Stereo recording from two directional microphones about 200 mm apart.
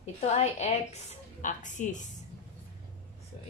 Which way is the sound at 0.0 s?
35° left (ahead or behind).